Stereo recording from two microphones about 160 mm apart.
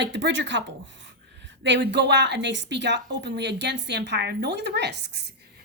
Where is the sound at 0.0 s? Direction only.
90° right.